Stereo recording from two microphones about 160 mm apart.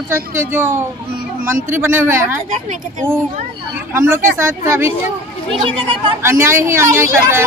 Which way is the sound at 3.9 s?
15° right (ahead or behind).